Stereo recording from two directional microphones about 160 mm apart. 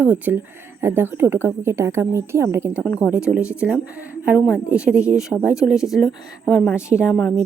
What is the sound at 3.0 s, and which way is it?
Speech, 20° left (ahead or behind).